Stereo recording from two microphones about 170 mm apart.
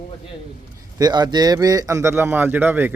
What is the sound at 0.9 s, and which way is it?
Speech, 25° right (ahead or behind).